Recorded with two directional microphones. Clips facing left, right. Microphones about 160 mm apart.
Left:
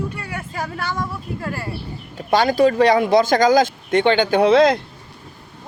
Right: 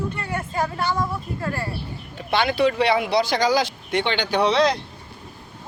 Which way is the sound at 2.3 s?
40° left (ahead or behind).